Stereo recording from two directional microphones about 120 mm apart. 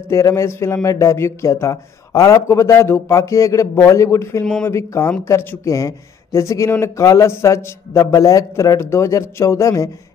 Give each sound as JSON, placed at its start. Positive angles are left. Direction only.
{"t": 0.1, "sound": "speech", "side_deg": 25}